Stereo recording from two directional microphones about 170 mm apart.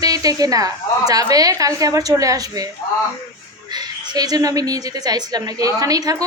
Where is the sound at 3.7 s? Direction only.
25° right (ahead or behind).